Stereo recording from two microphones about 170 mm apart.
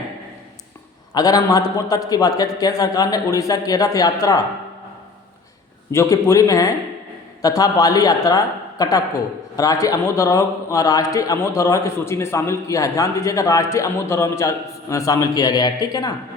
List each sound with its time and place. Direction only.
1.1 s a man's voice: 20° left (ahead or behind)
5.9 s a man's voice: 15° left (ahead or behind)